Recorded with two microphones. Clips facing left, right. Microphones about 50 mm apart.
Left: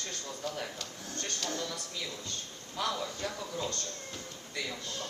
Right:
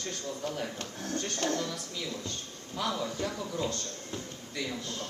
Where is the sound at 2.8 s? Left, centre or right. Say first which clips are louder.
Right 2 dB; centre.